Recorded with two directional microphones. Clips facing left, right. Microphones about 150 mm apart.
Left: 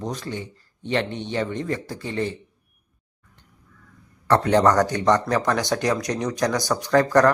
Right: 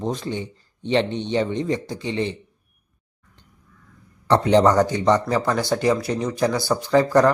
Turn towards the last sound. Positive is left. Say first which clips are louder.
# right 1 dB
turn(degrees=-10)  # may be behind; listen again after turning